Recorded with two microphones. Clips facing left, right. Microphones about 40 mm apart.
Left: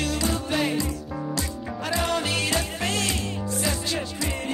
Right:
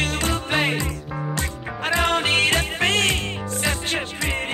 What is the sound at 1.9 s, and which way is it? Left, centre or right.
Music, right.